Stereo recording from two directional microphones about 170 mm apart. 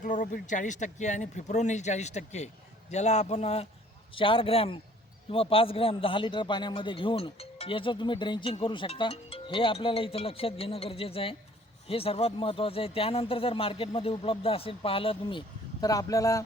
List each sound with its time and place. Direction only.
0.0 s a man's voice: 50° left (ahead or behind); by 16.4 s 20° left (ahead or behind)